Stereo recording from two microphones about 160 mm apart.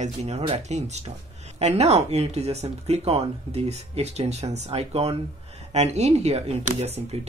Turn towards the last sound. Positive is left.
turn(degrees=-40)  # may be behind; listen again after turning